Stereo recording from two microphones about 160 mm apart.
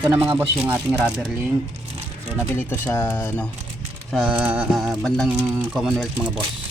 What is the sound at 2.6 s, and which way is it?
Speech, 15° left (ahead or behind).